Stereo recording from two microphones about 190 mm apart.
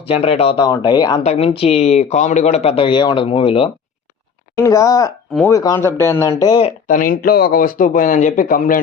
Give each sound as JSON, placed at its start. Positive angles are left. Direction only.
{"t": 0.0, "sound": "speech", "side_deg": 30}
{"t": 1.2, "sound": "speech", "side_deg": 35}
{"t": 4.5, "sound": "speech", "side_deg": 15}
{"t": 6.8, "sound": "speech", "side_deg": 45}